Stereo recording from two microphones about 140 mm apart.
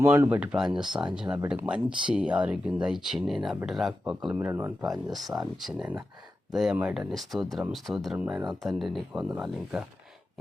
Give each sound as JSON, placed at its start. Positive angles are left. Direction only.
{"t": 0.0, "sound": "speech", "side_deg": -15}
{"t": 4.4, "sound": "speech", "side_deg": -20}
{"t": 4.8, "sound": "speech", "side_deg": 0}